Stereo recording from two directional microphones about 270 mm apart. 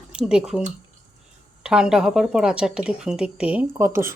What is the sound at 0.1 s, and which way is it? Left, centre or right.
Speech, centre.